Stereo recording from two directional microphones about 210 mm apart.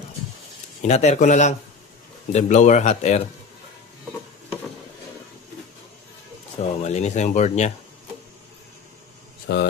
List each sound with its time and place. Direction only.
0.8 s speech: 35° left (ahead or behind)
6.6 s speech: 35° left (ahead or behind)
9.5 s speech: 50° left (ahead or behind)